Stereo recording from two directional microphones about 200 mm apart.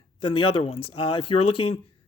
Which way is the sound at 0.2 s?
25° left (ahead or behind).